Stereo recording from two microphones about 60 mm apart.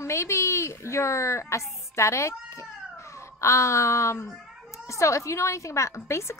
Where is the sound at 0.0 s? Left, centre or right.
Left.